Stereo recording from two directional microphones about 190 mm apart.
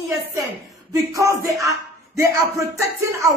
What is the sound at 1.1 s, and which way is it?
A woman's voice, 15° right (ahead or behind).